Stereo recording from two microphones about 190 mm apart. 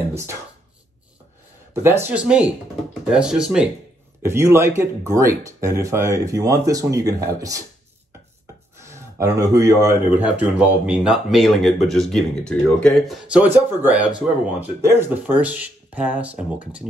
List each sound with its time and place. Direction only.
0.1 s speech: 15° right (ahead or behind)
1.7 s speech: 10° right (ahead or behind)
4.2 s speech: 15° right (ahead or behind)
8.7 s speech: 15° right (ahead or behind)